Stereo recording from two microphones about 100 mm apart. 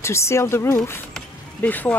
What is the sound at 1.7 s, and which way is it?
Speech, 15° left (ahead or behind).